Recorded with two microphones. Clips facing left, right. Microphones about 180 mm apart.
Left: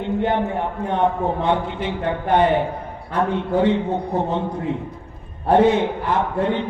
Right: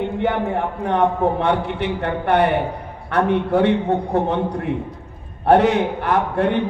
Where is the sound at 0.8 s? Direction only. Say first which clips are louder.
Right 3 dB; 75° right (ahead or behind).